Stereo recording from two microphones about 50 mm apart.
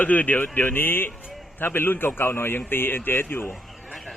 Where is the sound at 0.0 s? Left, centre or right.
Left.